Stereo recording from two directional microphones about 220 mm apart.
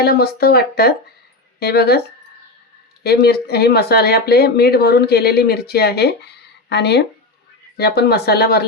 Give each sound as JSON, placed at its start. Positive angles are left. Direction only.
{"t": 0.0, "sound": "speech", "side_deg": 45}
{"t": 3.0, "sound": "speech", "side_deg": 45}